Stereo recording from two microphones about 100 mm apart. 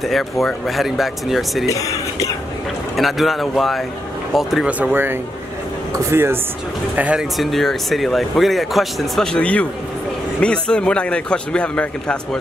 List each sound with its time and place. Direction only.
0.1 s speech: centre (ahead or behind)
1.7 s speech: 35° left (ahead or behind)
3.0 s speech: centre (ahead or behind)
5.9 s speech: 25° right (ahead or behind)
7.0 s speech: 10° right (ahead or behind)
7.3 s a man's voice: centre (ahead or behind)